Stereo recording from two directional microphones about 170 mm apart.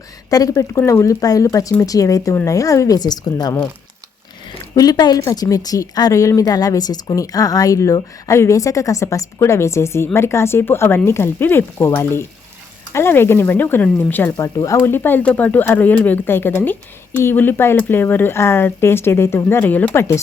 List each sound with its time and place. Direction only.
0.3 s speech: 20° left (ahead or behind)
4.7 s speech: 25° left (ahead or behind)